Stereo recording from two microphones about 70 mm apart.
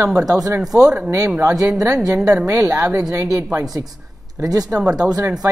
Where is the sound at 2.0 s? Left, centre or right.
Right.